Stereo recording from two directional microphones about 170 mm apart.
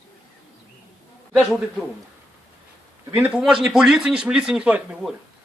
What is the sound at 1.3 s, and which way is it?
Speech, centre (ahead or behind).